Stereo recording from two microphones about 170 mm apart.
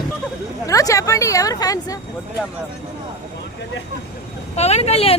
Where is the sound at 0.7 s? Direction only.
20° left (ahead or behind).